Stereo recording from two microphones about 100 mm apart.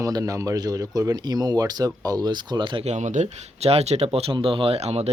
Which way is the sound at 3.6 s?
90° right.